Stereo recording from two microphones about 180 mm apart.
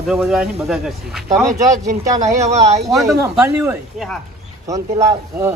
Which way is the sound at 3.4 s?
15° right (ahead or behind).